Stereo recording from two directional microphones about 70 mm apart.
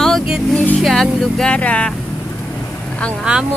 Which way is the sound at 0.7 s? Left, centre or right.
Centre.